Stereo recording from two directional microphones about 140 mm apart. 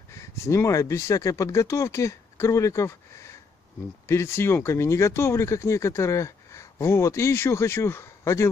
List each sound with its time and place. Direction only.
0.1 s speech: 20° left (ahead or behind)